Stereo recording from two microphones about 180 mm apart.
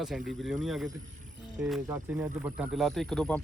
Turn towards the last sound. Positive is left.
turn(degrees=0)  # may be behind; listen again after turning